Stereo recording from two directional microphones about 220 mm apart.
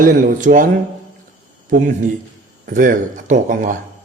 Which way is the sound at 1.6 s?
35° right (ahead or behind).